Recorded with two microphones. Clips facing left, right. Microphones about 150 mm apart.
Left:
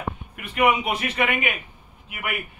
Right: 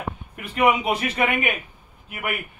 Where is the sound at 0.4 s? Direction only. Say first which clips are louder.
Right 1 dB; 35° right (ahead or behind).